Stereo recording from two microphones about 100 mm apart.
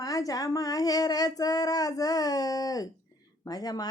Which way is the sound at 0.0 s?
40° left (ahead or behind).